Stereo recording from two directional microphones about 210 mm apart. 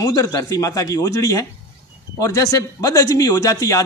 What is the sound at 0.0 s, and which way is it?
A man's voice, 20° left (ahead or behind).